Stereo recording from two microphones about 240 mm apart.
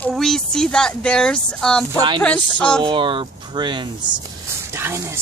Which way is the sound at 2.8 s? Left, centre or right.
Right.